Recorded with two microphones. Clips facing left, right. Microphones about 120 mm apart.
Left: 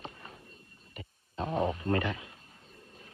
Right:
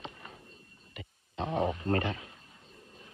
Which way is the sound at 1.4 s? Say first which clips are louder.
Even; 25° right (ahead or behind).